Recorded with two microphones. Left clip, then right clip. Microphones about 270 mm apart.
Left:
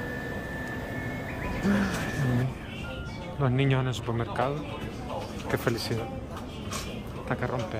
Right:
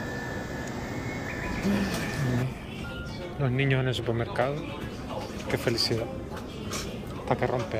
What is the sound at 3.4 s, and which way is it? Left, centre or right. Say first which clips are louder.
Speech: even; centre.